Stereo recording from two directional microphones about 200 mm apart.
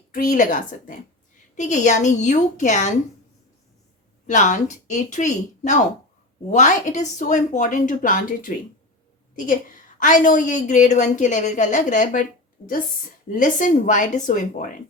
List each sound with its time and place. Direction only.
0.1 s a woman's voice: 40° left (ahead or behind)
4.3 s a woman's voice: 35° left (ahead or behind)
10.0 s a woman's voice: 40° left (ahead or behind)
13.3 s a woman's voice: 40° left (ahead or behind)